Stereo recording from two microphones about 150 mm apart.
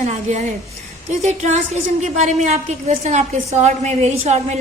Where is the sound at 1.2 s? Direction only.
50° right (ahead or behind).